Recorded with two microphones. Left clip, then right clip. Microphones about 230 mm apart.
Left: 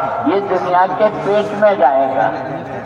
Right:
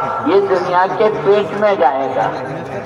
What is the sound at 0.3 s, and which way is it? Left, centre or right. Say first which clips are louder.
Speech: right 3 dB; right.